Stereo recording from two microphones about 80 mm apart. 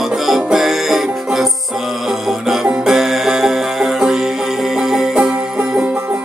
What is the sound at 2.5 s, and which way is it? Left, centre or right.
Music, centre.